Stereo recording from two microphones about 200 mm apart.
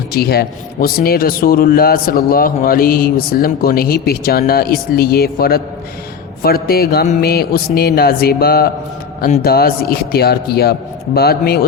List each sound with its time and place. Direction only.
0.1 s a man's voice: 50° left (ahead or behind)